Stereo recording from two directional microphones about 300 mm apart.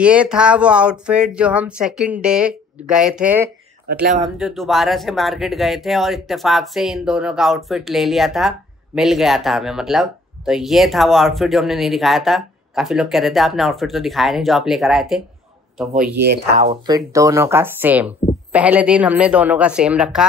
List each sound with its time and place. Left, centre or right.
0.0 s speech: centre
3.8 s speech: right
4.2 s speech: centre
16.2 s speech: right
16.6 s speech: centre